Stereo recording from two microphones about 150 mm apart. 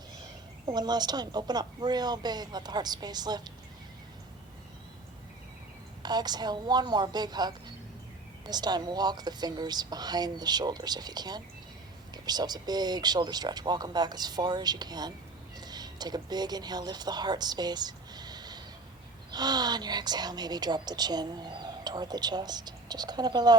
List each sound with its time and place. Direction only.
0.6 s a woman's voice: 25° right (ahead or behind)
6.0 s a woman's voice: 25° right (ahead or behind)